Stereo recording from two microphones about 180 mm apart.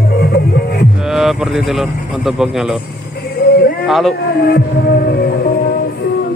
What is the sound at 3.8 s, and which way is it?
Speech, centre (ahead or behind).